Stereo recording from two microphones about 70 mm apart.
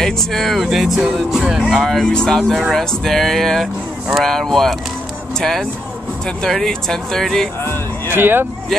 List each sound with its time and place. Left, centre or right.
0.0 s speech: centre
1.9 s speech: centre
8.1 s speech: right